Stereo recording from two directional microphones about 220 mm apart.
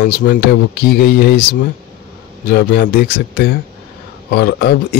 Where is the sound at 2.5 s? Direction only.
50° left (ahead or behind).